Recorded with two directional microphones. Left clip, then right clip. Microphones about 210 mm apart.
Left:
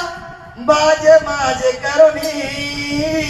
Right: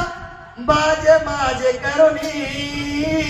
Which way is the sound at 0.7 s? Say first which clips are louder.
Left 4 dB; 35° left (ahead or behind).